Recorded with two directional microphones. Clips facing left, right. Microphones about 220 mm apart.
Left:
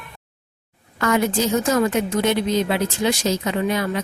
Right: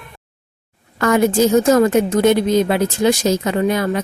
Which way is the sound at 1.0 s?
50° right (ahead or behind).